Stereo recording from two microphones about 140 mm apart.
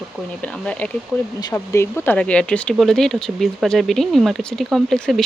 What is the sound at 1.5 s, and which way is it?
Speech, 20° left (ahead or behind).